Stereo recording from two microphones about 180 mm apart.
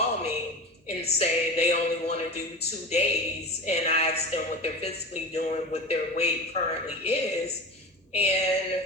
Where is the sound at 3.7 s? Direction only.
35° left (ahead or behind).